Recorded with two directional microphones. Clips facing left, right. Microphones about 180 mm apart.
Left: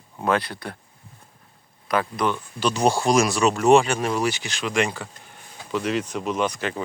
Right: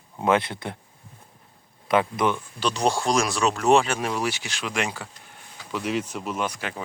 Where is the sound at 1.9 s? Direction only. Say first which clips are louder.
Right 1 dB; 20° right (ahead or behind).